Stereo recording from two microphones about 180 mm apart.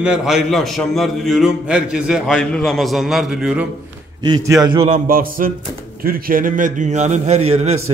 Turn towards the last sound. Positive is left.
turn(degrees=-35)  # may be behind; listen again after turning